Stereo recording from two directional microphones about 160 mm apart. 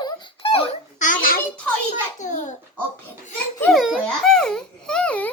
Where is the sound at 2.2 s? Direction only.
50° left (ahead or behind).